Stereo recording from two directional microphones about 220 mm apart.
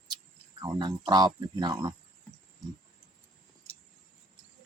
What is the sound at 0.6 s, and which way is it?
Speech, 20° right (ahead or behind).